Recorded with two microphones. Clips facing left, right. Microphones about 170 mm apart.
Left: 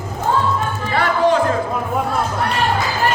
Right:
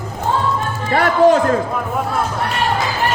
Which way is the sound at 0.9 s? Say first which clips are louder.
Right 4 dB; 40° right (ahead or behind).